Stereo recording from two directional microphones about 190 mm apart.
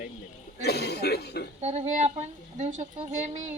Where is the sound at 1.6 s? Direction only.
35° right (ahead or behind).